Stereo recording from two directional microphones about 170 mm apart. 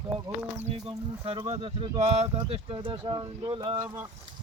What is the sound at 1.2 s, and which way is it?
Speech, 35° right (ahead or behind).